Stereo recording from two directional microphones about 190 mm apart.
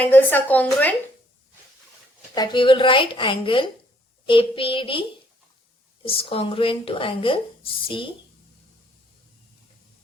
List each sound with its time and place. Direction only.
0.0 s speech: 10° left (ahead or behind)
2.3 s a woman's voice: 25° left (ahead or behind)